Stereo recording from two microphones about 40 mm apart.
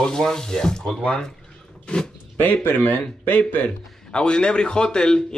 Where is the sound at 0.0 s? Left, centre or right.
Centre.